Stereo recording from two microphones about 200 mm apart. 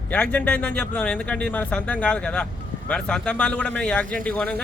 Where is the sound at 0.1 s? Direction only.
5° left (ahead or behind).